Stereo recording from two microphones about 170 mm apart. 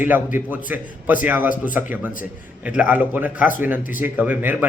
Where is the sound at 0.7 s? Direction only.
10° right (ahead or behind).